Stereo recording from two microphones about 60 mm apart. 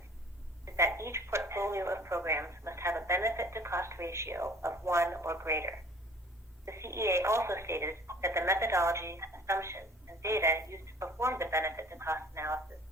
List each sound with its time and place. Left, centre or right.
0.6 s speech: right